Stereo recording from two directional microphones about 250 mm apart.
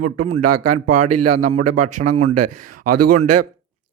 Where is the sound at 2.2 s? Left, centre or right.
Right.